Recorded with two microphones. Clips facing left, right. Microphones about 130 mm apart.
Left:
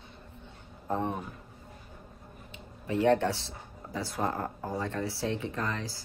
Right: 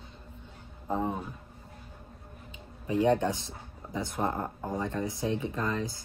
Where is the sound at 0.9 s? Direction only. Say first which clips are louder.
Right 1 dB; 5° right (ahead or behind).